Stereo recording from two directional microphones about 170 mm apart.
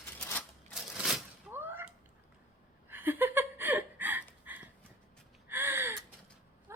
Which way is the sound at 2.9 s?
10° right (ahead or behind).